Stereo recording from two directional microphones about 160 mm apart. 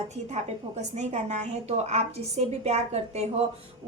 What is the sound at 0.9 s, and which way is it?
A woman's voice, 45° right (ahead or behind).